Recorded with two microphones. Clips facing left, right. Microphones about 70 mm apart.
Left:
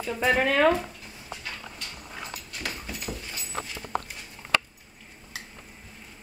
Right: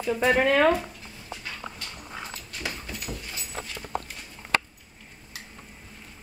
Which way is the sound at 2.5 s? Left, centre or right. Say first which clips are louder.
Right 1 dB; centre.